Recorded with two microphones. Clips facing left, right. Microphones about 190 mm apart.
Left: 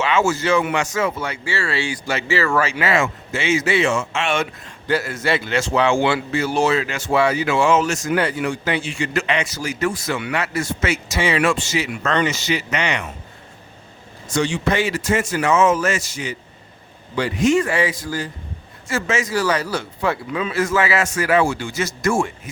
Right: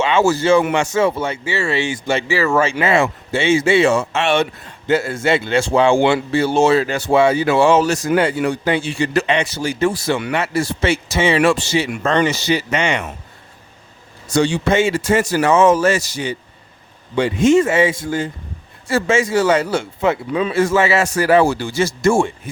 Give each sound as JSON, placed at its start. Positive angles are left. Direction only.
{"t": 0.0, "sound": "a man's voice", "side_deg": -30}
{"t": 4.9, "sound": "a man's voice", "side_deg": -25}
{"t": 14.3, "sound": "a man's voice", "side_deg": -35}